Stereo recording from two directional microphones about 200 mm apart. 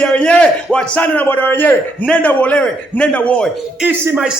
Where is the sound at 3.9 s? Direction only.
10° right (ahead or behind).